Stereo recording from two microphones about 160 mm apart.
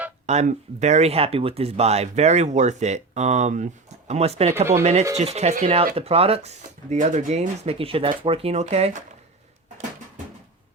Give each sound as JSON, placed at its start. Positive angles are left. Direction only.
{"t": 0.3, "sound": "speech", "side_deg": -45}
{"t": 4.5, "sound": "speech", "side_deg": -15}
{"t": 4.8, "sound": "speech", "side_deg": -45}